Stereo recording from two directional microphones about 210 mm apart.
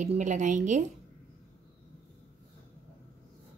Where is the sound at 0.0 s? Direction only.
35° right (ahead or behind).